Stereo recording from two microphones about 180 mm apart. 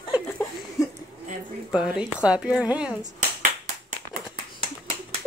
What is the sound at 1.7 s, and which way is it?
A woman's voice, 5° right (ahead or behind).